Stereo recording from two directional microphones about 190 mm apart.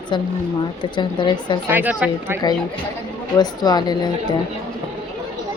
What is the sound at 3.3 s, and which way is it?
Speech, 20° left (ahead or behind).